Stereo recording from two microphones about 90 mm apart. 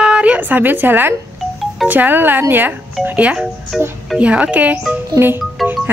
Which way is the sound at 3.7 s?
Centre (ahead or behind).